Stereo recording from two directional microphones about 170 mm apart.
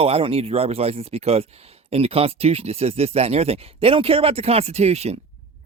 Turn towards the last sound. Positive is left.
turn(degrees=-40)  # may be behind; listen again after turning